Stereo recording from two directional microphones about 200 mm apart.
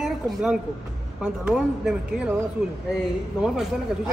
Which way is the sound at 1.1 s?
5° right (ahead or behind).